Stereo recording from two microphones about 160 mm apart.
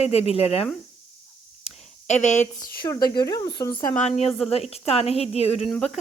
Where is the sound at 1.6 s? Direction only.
45° left (ahead or behind).